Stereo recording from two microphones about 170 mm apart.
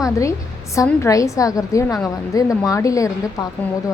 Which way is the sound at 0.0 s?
20° left (ahead or behind).